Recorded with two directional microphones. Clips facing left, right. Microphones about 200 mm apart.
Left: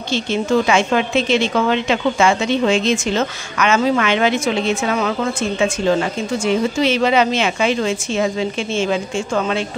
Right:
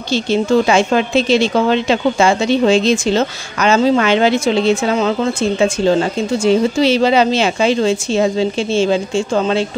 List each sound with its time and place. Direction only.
0.1 s a woman's voice: 35° right (ahead or behind)